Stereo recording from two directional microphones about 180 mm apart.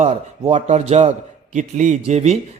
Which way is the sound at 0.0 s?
40° right (ahead or behind).